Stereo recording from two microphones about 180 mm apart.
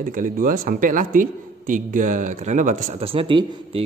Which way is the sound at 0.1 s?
50° right (ahead or behind).